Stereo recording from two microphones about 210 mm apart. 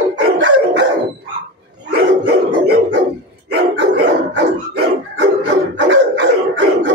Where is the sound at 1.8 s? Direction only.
50° right (ahead or behind).